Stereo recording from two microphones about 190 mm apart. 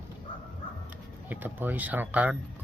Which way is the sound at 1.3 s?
10° right (ahead or behind).